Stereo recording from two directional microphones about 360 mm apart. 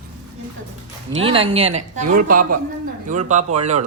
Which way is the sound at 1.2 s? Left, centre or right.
Centre.